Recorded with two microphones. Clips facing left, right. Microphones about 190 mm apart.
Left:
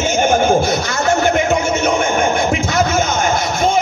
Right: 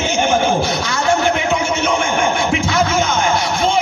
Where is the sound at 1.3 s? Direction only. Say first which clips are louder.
Left 3 dB; 45° left (ahead or behind).